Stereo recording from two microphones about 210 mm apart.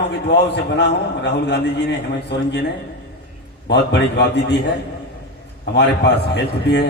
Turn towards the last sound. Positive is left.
turn(degrees=55)  # may be behind; listen again after turning